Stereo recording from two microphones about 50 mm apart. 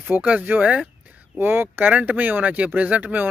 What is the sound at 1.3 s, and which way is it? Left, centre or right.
Speech, right.